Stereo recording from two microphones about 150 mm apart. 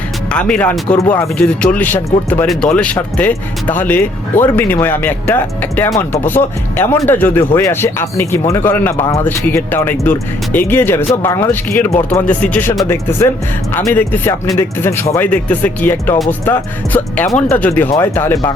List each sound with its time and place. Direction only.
0.3 s speech: 5° left (ahead or behind)